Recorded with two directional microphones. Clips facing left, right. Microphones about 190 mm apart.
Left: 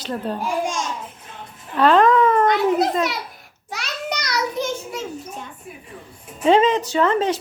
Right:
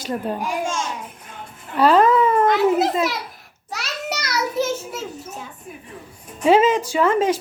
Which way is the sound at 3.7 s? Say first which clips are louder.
Even; 5° right (ahead or behind).